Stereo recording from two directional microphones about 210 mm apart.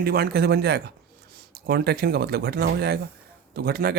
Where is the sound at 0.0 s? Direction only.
50° right (ahead or behind).